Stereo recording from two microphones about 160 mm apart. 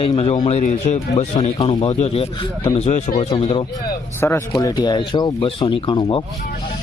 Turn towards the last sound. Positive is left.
turn(degrees=30)  # may be behind; listen again after turning